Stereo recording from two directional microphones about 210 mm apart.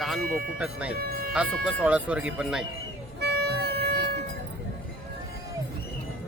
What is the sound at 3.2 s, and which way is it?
Music, 50° right (ahead or behind).